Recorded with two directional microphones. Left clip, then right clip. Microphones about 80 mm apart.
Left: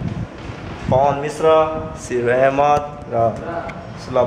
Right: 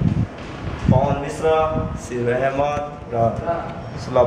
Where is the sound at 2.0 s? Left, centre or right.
Left.